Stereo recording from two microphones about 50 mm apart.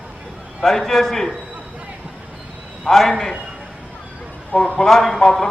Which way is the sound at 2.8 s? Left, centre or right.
Centre.